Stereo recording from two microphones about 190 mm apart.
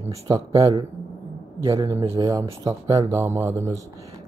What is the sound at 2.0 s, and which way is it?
Speech, 15° right (ahead or behind).